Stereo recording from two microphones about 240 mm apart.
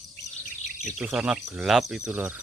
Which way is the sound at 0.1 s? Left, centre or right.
Left.